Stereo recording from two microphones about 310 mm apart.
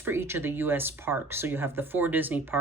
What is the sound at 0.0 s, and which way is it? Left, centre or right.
Speech, centre.